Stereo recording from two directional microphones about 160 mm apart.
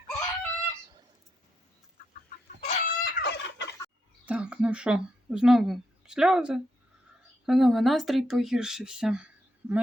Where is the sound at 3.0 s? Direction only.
80° left.